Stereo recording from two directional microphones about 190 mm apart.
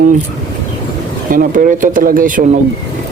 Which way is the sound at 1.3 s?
45° right (ahead or behind).